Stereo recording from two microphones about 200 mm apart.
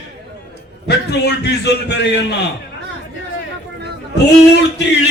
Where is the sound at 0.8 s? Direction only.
55° left (ahead or behind).